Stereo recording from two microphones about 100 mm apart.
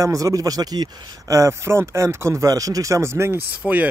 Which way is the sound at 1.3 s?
30° right (ahead or behind).